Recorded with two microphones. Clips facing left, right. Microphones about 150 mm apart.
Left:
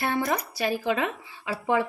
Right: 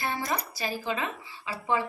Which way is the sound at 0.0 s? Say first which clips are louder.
Left 5 dB; 60° left (ahead or behind).